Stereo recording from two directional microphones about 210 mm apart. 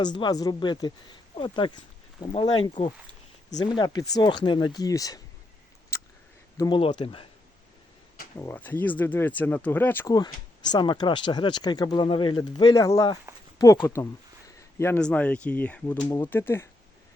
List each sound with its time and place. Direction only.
0.0 s speech: 20° left (ahead or behind)
5.9 s a sound: 15° left (ahead or behind)
6.6 s speech: 25° left (ahead or behind)
8.4 s speech: 10° left (ahead or behind)
13.3 s a sound: 10° right (ahead or behind)
13.8 s speech: 15° left (ahead or behind)